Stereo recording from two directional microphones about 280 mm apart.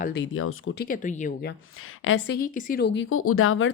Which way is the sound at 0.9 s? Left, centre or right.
Left.